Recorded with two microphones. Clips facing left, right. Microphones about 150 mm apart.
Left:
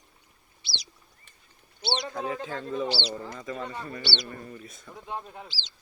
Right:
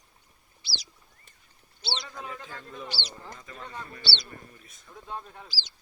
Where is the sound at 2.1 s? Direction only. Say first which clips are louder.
Left 8 dB; 90° left.